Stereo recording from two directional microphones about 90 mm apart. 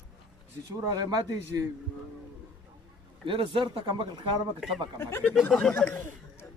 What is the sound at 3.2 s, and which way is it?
Speech, 70° right (ahead or behind).